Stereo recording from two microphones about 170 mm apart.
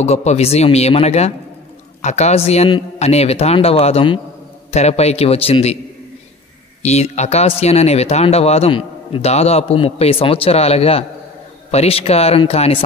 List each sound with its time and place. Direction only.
0.0 s speech: 40° left (ahead or behind)
6.8 s speech: 40° left (ahead or behind)